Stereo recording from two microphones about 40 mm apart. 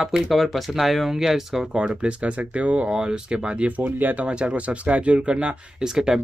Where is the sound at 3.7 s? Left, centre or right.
Right.